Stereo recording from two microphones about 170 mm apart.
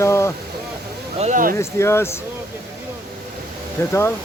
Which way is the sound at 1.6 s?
15° left (ahead or behind).